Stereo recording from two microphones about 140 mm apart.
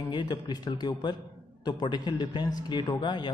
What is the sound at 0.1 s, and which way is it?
A man's voice, 30° left (ahead or behind).